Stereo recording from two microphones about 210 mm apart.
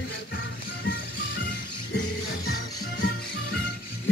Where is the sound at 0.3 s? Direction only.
50° left (ahead or behind).